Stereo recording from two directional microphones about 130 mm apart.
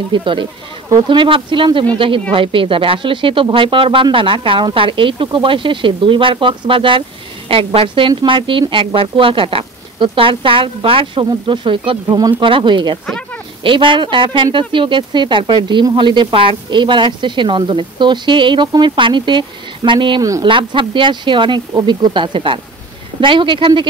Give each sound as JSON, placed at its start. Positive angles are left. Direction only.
{"t": 0.1, "sound": "speech", "side_deg": -40}